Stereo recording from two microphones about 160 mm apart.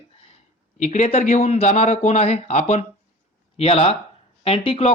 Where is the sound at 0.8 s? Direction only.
45° left (ahead or behind).